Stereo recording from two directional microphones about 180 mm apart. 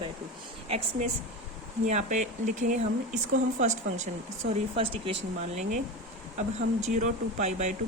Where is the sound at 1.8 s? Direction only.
40° right (ahead or behind).